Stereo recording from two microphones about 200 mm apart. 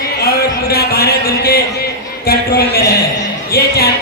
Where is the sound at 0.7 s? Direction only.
50° left (ahead or behind).